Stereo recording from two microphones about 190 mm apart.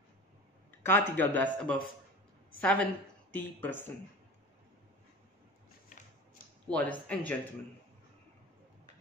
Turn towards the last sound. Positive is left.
turn(degrees=10)  # may be behind; listen again after turning